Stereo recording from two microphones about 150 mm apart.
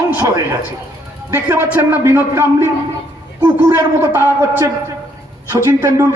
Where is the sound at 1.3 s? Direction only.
15° right (ahead or behind).